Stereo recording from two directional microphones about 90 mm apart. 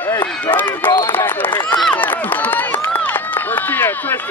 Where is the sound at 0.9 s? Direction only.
50° left (ahead or behind).